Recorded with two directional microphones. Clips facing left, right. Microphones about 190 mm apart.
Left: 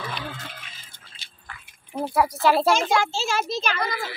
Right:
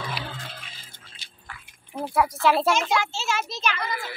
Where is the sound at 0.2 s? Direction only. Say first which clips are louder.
Left 1 dB; 5° right (ahead or behind).